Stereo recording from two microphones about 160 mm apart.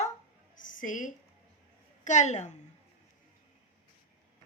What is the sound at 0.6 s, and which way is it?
A woman's voice, 55° left (ahead or behind).